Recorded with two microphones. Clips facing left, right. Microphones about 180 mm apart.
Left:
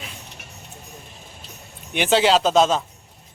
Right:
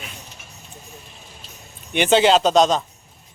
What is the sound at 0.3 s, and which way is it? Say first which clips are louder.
Vehicle: left 2 dB; 65° left (ahead or behind).